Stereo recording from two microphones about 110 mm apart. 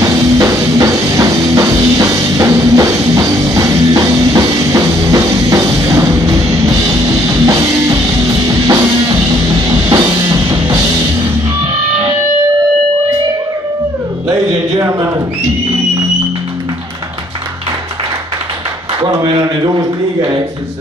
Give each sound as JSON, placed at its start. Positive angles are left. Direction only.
{"t": 0.0, "sound": "music", "side_deg": -30}
{"t": 9.9, "sound": "music", "side_deg": -35}
{"t": 14.3, "sound": "music", "side_deg": -30}
{"t": 19.2, "sound": "a sound", "side_deg": -40}